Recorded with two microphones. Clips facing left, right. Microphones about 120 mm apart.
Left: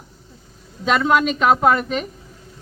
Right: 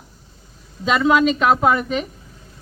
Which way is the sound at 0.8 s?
Centre (ahead or behind).